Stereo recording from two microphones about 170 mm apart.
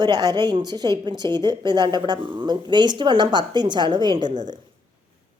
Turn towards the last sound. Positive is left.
turn(degrees=-25)  # may be behind; listen again after turning